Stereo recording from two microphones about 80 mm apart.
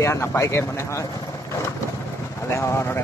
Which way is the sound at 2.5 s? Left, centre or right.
Left.